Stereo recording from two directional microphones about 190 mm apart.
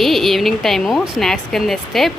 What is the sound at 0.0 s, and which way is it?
Speech, centre (ahead or behind).